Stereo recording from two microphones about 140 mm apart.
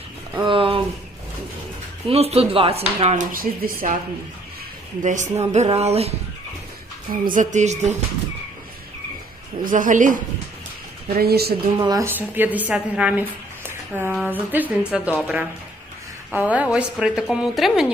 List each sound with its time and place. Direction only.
0.4 s speech: 40° right (ahead or behind)
2.0 s speech: 45° right (ahead or behind)
3.3 s speech: 90° right
5.0 s speech: 60° right (ahead or behind)
7.1 s a woman's voice: 75° right (ahead or behind); by 7.9 s 55° right (ahead or behind)
9.6 s a woman's voice: 70° right (ahead or behind)
11.1 s speech: 90° right
11.8 s speech: 30° right (ahead or behind)
12.0 s a woman's voice: 15° right (ahead or behind)
13.7 s a sound: 15° right (ahead or behind)
14.3 s a woman's voice: 10° right (ahead or behind)